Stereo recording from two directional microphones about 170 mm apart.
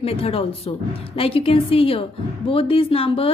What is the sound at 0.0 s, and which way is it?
A woman's voice, 35° left (ahead or behind).